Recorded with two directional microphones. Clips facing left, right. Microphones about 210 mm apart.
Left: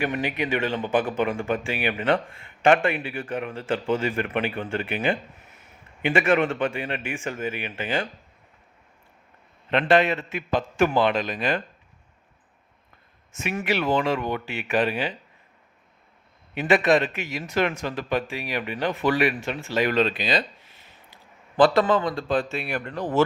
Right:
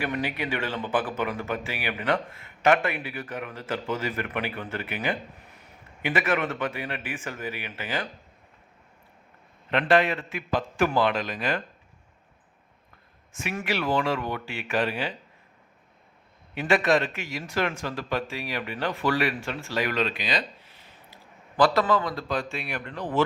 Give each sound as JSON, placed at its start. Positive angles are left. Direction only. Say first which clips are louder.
{"t": 0.0, "sound": "speech", "louder": "left 3 dB", "side_deg": 20}
{"t": 9.6, "sound": "speech", "louder": "left 2 dB", "side_deg": 25}
{"t": 13.3, "sound": "speech", "louder": "left 3 dB", "side_deg": 20}
{"t": 16.6, "sound": "speech", "louder": "left 3 dB", "side_deg": 20}
{"t": 21.5, "sound": "a man's voice", "louder": "left 3 dB", "side_deg": 25}